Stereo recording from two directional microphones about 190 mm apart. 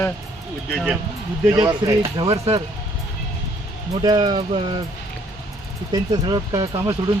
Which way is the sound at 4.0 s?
20° right (ahead or behind).